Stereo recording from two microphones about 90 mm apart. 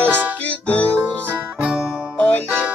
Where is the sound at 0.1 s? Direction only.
20° right (ahead or behind).